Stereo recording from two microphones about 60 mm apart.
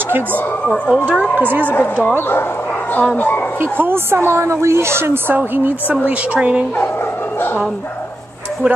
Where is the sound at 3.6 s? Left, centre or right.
Right.